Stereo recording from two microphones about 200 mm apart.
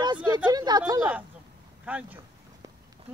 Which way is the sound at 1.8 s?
5° right (ahead or behind).